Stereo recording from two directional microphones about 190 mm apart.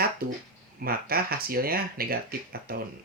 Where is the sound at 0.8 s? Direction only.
50° right (ahead or behind).